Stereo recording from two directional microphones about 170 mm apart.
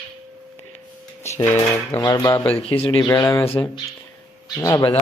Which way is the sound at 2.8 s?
30° left (ahead or behind).